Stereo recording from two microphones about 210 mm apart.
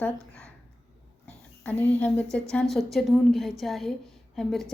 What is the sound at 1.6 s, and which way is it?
A woman's voice, 10° left (ahead or behind).